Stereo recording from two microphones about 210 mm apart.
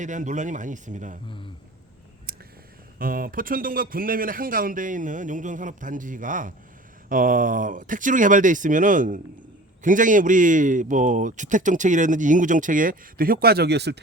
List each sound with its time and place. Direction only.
0.0 s a man's voice: 35° right (ahead or behind)
3.0 s a man's voice: 45° right (ahead or behind)